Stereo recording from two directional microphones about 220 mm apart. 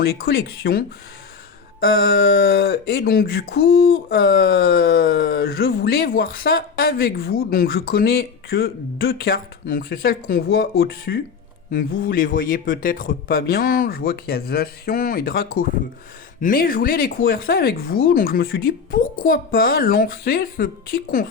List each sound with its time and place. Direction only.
0.0 s speech: 45° left (ahead or behind)